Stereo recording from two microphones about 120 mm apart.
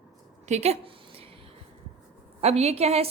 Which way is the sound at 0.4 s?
65° right (ahead or behind).